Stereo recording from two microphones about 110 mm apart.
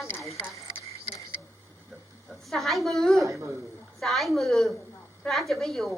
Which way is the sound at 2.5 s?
Centre (ahead or behind).